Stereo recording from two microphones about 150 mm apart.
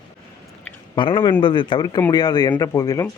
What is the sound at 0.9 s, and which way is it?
A man's voice, 35° left (ahead or behind).